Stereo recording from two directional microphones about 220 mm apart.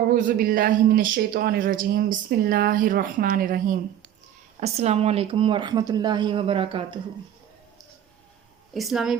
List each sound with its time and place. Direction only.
0.1 s speech: 40° right (ahead or behind)
4.6 s speech: 30° right (ahead or behind)
8.7 s speech: centre (ahead or behind)